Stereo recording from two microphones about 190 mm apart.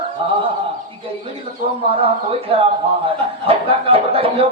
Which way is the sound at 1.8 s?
30° right (ahead or behind).